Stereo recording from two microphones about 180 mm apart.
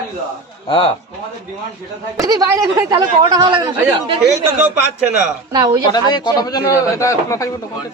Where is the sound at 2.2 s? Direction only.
20° right (ahead or behind).